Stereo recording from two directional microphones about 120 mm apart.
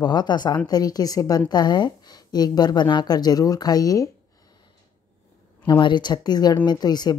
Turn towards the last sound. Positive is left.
turn(degrees=35)  # may be behind; listen again after turning